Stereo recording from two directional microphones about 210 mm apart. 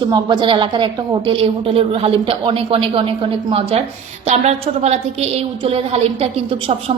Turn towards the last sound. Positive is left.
turn(degrees=-25)  # may be behind; listen again after turning